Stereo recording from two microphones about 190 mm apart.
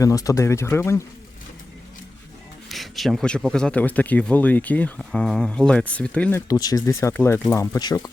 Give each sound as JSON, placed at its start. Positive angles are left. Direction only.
{"t": 0.0, "sound": "speech", "side_deg": 20}
{"t": 2.6, "sound": "speech", "side_deg": 0}
{"t": 6.5, "sound": "speech", "side_deg": 20}